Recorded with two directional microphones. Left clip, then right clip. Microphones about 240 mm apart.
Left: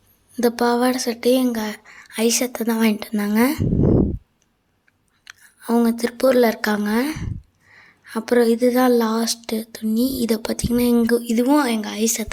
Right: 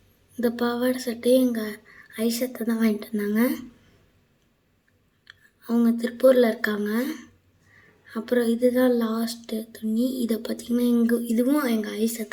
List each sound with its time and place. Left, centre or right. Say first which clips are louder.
0.3 s speech: left 7 dB; left
5.2 s speech: left 8 dB; left